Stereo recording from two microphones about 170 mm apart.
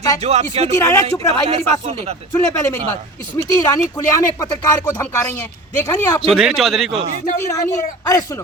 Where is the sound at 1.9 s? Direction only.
35° right (ahead or behind).